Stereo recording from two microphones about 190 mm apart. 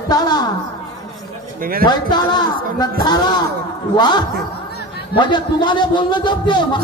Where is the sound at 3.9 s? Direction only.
25° left (ahead or behind).